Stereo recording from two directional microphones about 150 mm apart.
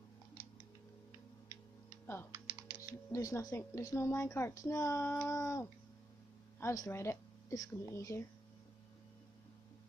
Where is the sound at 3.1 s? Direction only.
20° left (ahead or behind).